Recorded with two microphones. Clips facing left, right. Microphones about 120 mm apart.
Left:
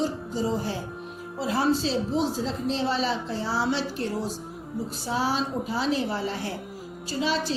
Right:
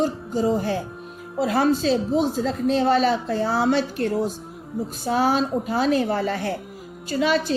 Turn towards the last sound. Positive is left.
turn(degrees=-60)  # may be behind; listen again after turning